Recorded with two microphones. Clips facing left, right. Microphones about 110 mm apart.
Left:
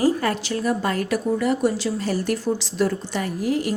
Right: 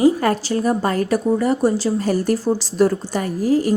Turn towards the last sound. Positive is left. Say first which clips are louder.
# right 5 dB
turn(degrees=-35)  # may be behind; listen again after turning